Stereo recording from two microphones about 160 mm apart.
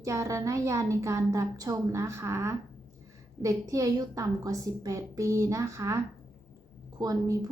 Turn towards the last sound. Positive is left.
turn(degrees=-20)  # may be behind; listen again after turning